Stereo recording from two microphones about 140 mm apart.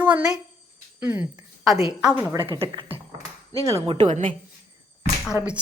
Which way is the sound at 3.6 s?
20° right (ahead or behind).